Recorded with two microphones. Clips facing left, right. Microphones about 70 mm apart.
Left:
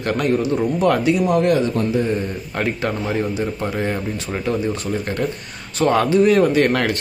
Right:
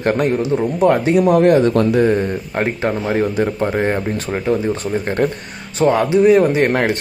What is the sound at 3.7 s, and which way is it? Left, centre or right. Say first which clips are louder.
Speech: right 5 dB; right.